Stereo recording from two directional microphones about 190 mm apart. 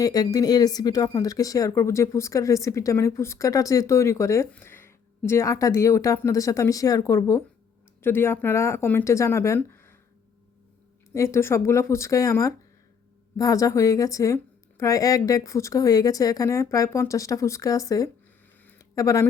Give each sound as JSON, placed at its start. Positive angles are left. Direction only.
{"t": 0.0, "sound": "speech", "side_deg": 20}
{"t": 11.1, "sound": "speech", "side_deg": 15}
{"t": 18.6, "sound": "a sound", "side_deg": 15}